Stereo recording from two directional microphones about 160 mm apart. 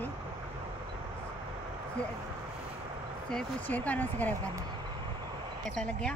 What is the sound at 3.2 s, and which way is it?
Speech, 5° left (ahead or behind).